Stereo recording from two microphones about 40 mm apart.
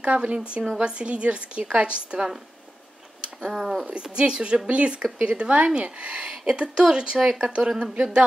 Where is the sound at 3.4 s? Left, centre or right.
Centre.